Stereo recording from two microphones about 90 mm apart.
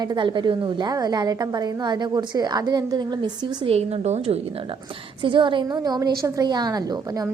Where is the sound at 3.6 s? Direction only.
90° right.